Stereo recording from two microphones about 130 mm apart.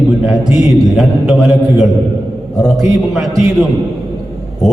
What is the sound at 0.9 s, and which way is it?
A man's voice, centre (ahead or behind).